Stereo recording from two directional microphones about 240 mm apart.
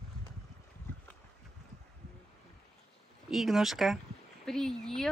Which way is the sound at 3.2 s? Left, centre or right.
Centre.